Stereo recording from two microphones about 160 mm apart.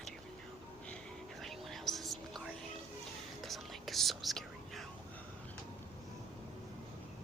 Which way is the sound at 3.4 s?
Centre (ahead or behind).